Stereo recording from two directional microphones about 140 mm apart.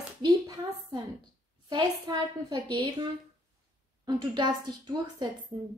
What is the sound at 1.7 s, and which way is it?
Speech, 30° right (ahead or behind).